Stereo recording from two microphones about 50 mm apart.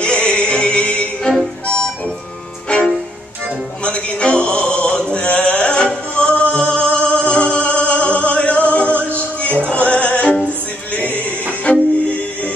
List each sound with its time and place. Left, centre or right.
0.0 s music: centre
3.8 s male singing: left
9.8 s music: left
11.7 s music: left